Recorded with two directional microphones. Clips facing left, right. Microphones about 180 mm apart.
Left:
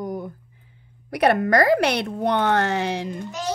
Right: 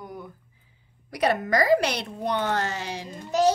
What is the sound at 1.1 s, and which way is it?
A woman's voice, 60° left (ahead or behind).